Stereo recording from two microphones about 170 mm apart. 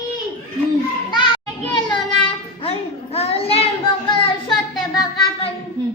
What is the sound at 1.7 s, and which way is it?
Child singing, 25° left (ahead or behind).